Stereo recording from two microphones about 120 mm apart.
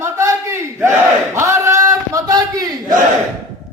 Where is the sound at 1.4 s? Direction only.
25° right (ahead or behind).